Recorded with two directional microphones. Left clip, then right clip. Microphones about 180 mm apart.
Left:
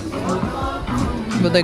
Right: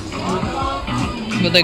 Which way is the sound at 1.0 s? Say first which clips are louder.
Right 1 dB; centre (ahead or behind).